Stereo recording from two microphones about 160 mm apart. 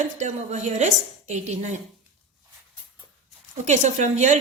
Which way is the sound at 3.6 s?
50° right (ahead or behind).